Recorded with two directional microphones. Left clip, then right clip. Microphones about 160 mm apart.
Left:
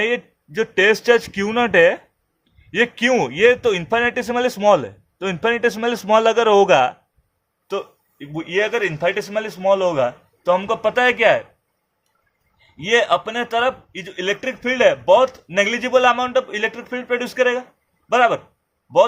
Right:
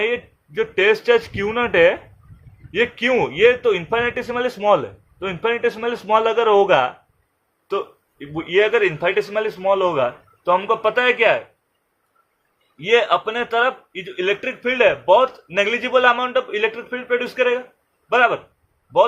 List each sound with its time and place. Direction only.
0.0 s speech: 50° left (ahead or behind)
7.7 s speech: 35° left (ahead or behind)
12.7 s speech: 45° left (ahead or behind)